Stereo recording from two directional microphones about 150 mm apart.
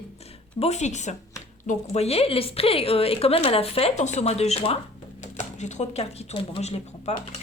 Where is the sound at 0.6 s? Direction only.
50° left (ahead or behind).